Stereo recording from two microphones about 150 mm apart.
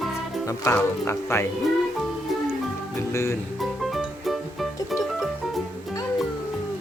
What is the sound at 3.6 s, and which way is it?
Music, centre (ahead or behind).